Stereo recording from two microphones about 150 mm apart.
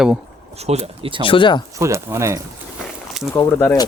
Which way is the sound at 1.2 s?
35° left (ahead or behind).